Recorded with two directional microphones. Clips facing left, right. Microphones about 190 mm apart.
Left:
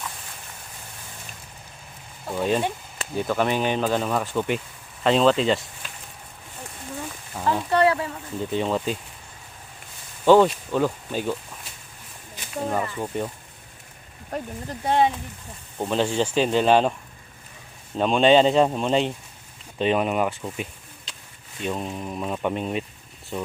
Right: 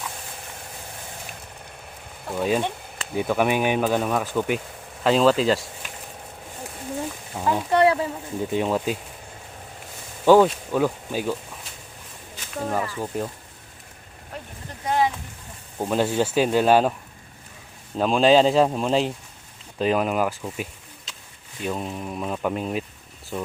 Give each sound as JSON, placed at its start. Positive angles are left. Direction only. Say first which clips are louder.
{"t": 2.3, "sound": "speech", "louder": "even", "side_deg": 0}
{"t": 7.3, "sound": "speech", "louder": "right 1 dB", "side_deg": -15}
{"t": 8.4, "sound": "speech", "louder": "right 1 dB", "side_deg": -10}
{"t": 10.2, "sound": "speech", "louder": "even", "side_deg": -10}
{"t": 12.4, "sound": "speech", "louder": "even", "side_deg": 5}
{"t": 14.3, "sound": "speech", "louder": "left 7 dB", "side_deg": 45}
{"t": 14.8, "sound": "speech", "louder": "left 2 dB", "side_deg": 25}
{"t": 15.8, "sound": "speech", "louder": "right 1 dB", "side_deg": -10}
{"t": 17.9, "sound": "speech", "louder": "even", "side_deg": 0}